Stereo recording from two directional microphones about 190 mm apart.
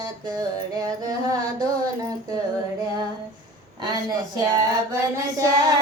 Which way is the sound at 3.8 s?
20° right (ahead or behind).